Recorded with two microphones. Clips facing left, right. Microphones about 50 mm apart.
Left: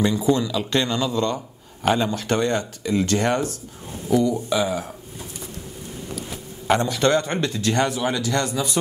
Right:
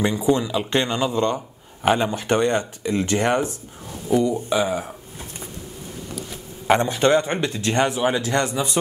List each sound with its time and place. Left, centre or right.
0.0 s speech: right
6.7 s speech: right